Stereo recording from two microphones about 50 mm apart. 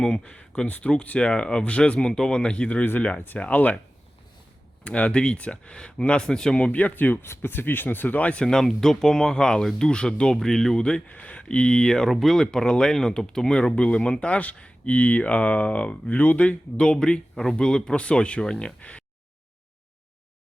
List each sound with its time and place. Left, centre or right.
0.0 s speech: centre
4.8 s speech: left
6.7 s speech: left
8.4 s speech: centre
11.1 s speech: left
18.8 s speech: left